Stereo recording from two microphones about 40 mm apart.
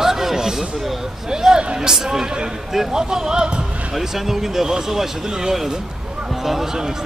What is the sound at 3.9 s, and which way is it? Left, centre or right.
Speech, centre.